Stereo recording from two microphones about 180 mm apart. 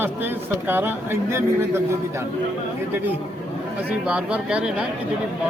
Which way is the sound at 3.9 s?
5° right (ahead or behind).